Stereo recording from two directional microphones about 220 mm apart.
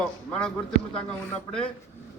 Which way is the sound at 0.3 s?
5° left (ahead or behind).